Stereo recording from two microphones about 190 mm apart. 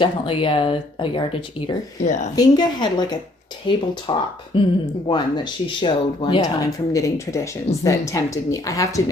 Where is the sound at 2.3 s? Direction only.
20° left (ahead or behind).